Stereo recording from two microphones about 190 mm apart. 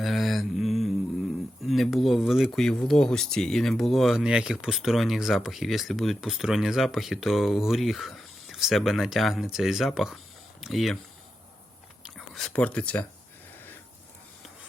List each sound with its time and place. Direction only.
0.0 s speech: centre (ahead or behind)
12.0 s speech: centre (ahead or behind)